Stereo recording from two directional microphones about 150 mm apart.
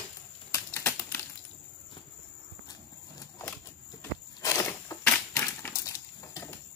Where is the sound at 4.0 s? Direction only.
20° left (ahead or behind).